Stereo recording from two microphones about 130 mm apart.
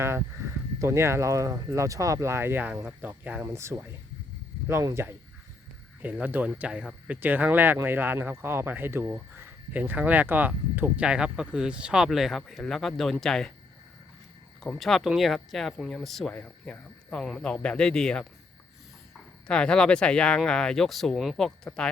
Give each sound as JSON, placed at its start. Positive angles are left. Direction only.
{"t": 0.8, "sound": "speech", "side_deg": -20}
{"t": 14.6, "sound": "speech", "side_deg": 5}
{"t": 19.5, "sound": "speech", "side_deg": 5}